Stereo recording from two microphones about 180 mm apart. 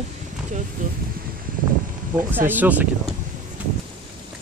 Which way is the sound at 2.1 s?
10° right (ahead or behind).